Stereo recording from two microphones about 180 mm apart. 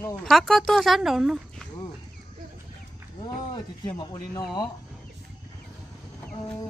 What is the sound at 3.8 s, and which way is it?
Speech, 20° left (ahead or behind).